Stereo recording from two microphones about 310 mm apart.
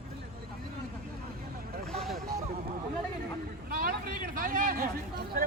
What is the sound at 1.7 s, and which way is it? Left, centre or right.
Vehicle, centre.